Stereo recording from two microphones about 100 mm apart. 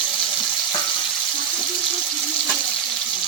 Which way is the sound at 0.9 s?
Centre (ahead or behind).